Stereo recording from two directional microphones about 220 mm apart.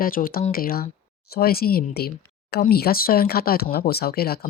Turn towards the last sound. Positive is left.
turn(degrees=45)  # may be behind; listen again after turning